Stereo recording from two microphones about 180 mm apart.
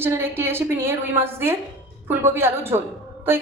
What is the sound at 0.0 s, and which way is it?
A woman's voice, 15° right (ahead or behind).